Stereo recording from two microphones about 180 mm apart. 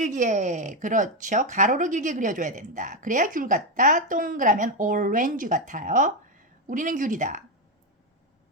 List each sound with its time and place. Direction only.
0.0 s speech: 45° right (ahead or behind)